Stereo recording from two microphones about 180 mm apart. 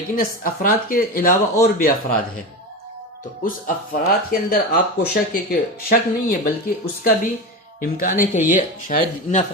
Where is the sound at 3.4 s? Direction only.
50° left (ahead or behind).